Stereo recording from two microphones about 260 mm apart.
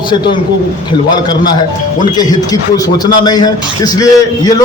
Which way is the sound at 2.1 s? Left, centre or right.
Centre.